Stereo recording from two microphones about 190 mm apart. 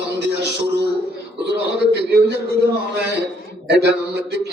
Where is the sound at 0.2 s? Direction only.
60° right (ahead or behind).